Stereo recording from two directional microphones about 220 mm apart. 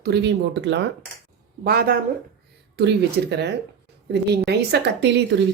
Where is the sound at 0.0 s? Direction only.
50° right (ahead or behind).